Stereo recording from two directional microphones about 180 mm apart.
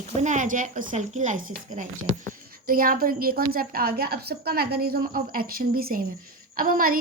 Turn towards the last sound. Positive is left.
turn(degrees=-55)  # may be behind; listen again after turning